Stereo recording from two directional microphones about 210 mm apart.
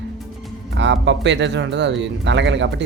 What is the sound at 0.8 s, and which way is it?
Speech, 60° right (ahead or behind).